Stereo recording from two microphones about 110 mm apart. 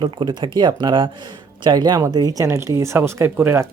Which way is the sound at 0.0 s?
45° right (ahead or behind).